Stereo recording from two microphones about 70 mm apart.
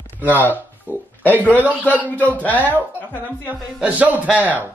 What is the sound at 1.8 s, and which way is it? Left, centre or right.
Speech, left.